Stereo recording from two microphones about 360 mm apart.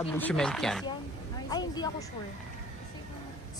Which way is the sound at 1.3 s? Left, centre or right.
Centre.